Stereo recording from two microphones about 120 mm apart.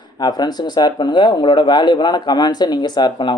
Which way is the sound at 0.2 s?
35° left (ahead or behind).